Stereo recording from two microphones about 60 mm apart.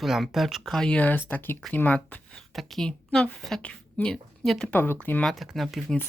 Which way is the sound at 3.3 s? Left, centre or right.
Centre.